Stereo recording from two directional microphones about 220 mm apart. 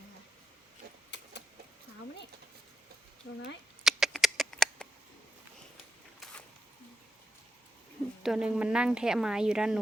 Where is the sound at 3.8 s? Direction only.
Centre (ahead or behind).